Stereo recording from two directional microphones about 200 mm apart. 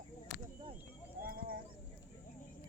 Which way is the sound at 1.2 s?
45° right (ahead or behind).